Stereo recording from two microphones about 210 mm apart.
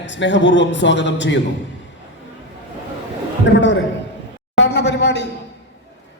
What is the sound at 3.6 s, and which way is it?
Speech, 60° left (ahead or behind).